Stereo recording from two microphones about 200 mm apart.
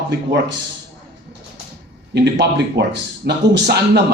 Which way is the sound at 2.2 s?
60° right (ahead or behind).